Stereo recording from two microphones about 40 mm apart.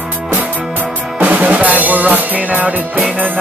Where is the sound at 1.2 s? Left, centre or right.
Right.